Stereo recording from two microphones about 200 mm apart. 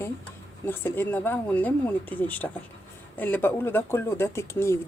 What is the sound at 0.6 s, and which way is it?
Speech, 10° left (ahead or behind).